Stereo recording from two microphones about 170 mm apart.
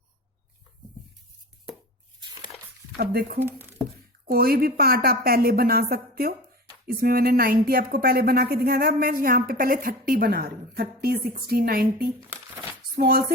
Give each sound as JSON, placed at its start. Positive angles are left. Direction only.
{"t": 3.0, "sound": "speech", "side_deg": -65}
{"t": 3.4, "sound": "speech", "side_deg": -15}
{"t": 4.3, "sound": "speech", "side_deg": -65}